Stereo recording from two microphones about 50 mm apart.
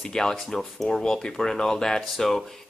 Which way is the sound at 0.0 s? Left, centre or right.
Centre.